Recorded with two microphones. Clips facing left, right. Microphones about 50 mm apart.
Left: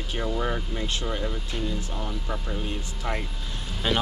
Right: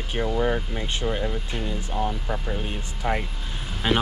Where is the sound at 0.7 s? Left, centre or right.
Right.